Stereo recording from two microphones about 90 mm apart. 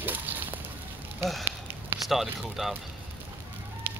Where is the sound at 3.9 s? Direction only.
25° right (ahead or behind).